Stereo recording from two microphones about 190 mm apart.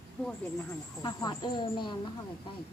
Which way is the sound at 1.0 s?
20° left (ahead or behind).